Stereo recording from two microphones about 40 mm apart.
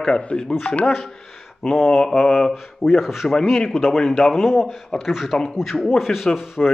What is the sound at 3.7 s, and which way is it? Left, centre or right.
A man's voice, centre.